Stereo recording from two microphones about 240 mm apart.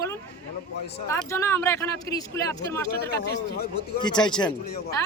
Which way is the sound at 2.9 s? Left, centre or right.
Left.